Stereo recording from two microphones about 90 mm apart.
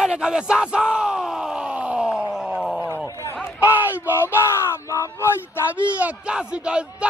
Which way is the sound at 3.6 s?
20° right (ahead or behind).